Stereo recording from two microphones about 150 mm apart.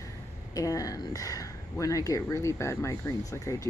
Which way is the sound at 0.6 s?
20° left (ahead or behind).